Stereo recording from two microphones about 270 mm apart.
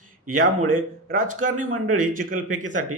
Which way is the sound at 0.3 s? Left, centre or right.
Right.